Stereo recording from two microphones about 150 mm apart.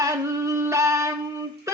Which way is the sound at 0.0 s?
20° right (ahead or behind).